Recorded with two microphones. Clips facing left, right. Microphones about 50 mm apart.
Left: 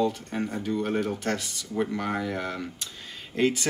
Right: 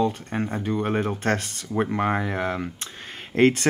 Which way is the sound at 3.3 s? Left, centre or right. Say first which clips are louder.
Right 6 dB; right.